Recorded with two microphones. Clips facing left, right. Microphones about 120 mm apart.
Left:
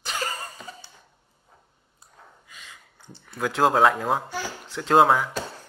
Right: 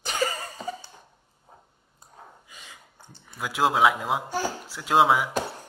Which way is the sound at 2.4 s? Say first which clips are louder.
Even; 5° right (ahead or behind).